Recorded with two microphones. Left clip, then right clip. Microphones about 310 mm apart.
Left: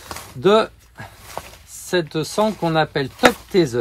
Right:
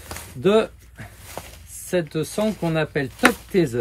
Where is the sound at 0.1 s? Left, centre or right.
Centre.